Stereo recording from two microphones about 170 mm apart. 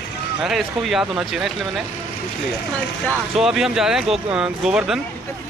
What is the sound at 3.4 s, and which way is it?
Speech, 5° right (ahead or behind).